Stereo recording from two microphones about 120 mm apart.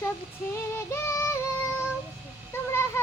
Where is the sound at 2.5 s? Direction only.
20° left (ahead or behind).